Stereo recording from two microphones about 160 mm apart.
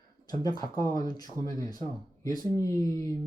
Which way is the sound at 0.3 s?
25° left (ahead or behind).